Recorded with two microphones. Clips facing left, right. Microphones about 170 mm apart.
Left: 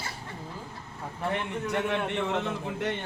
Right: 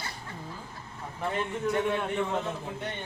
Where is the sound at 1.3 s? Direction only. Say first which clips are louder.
Right 2 dB; 70° left (ahead or behind).